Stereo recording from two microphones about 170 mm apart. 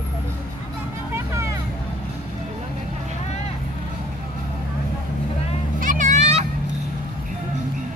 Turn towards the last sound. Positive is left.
turn(degrees=-40)  # may be behind; listen again after turning